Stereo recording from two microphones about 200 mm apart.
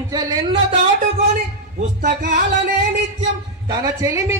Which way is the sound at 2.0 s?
50° right (ahead or behind).